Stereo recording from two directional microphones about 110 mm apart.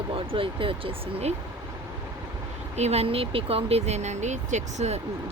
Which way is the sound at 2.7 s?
80° right.